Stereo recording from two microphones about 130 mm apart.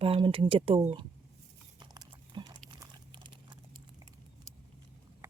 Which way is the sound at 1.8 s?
35° right (ahead or behind).